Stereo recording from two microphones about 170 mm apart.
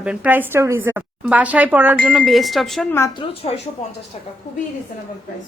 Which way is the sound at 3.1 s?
30° left (ahead or behind).